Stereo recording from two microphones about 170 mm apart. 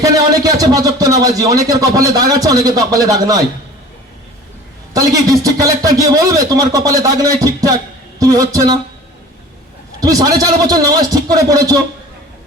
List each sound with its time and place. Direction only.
0.0 s speech: 20° right (ahead or behind)
4.9 s speech: 20° right (ahead or behind)
10.0 s speech: 20° right (ahead or behind)